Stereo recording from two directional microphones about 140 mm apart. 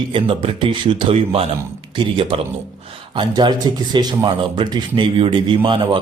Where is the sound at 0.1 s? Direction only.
40° right (ahead or behind).